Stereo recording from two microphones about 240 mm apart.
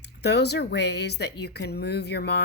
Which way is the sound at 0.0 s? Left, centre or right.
Left.